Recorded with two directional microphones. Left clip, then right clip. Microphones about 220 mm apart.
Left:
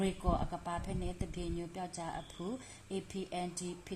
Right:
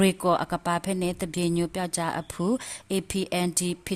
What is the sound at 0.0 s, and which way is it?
A woman's voice, 45° right (ahead or behind).